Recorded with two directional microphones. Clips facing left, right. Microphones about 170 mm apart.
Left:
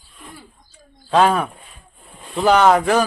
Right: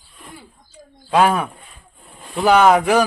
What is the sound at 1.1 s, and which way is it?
A man's voice, 10° right (ahead or behind).